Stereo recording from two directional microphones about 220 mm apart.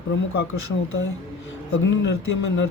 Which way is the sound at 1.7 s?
60° left (ahead or behind).